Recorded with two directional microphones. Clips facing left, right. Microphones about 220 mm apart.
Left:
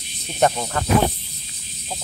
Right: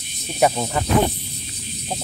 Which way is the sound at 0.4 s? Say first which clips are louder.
Right 1 dB; 10° right (ahead or behind).